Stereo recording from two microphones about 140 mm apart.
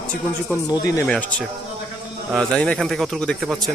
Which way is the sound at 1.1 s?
10° left (ahead or behind).